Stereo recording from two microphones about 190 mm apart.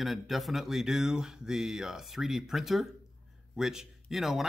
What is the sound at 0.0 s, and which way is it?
Speech, centre (ahead or behind).